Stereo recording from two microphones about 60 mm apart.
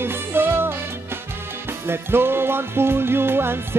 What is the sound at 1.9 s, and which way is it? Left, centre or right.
Music, right.